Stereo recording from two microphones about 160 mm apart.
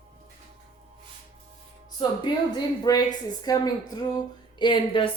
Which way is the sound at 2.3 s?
25° left (ahead or behind).